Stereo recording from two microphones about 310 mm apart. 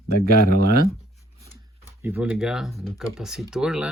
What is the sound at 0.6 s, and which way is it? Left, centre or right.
Speech, right.